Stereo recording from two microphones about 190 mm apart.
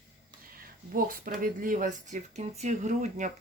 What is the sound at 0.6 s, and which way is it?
Speech, 50° right (ahead or behind).